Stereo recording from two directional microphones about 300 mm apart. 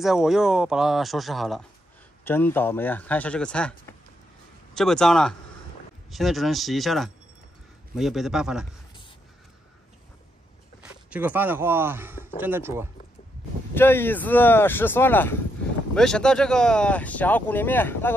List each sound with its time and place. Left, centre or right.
0.0 s speech: centre
10.8 s speech: centre
13.7 s speech: centre